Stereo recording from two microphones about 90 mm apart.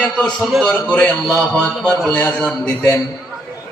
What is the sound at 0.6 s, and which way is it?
A man's voice, 15° left (ahead or behind).